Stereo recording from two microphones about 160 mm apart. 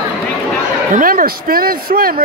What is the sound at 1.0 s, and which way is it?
Speech, 60° right (ahead or behind).